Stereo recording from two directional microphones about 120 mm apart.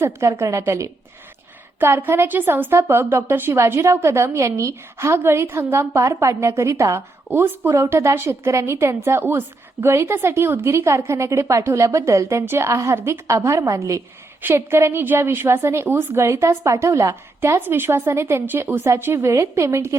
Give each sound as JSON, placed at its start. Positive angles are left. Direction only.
{"t": 0.0, "sound": "a woman's voice", "side_deg": -25}